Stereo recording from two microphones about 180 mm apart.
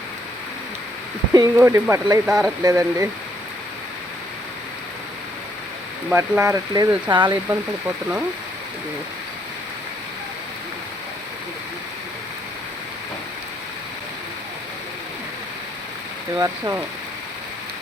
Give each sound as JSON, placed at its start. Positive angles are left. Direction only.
{"t": 1.3, "sound": "speech", "side_deg": -20}
{"t": 2.2, "sound": "speech", "side_deg": -5}
{"t": 2.6, "sound": "speech", "side_deg": -15}
{"t": 6.1, "sound": "speech", "side_deg": -15}
{"t": 16.4, "sound": "speech", "side_deg": -15}